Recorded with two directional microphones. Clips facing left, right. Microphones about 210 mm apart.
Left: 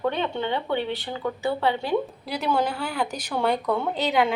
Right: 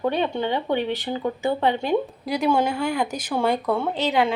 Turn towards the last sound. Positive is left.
turn(degrees=0)  # may be behind; listen again after turning